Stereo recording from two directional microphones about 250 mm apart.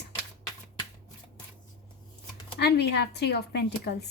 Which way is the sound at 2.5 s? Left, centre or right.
Left.